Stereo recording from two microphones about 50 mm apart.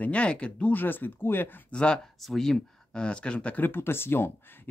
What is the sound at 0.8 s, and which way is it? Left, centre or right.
Speech, left.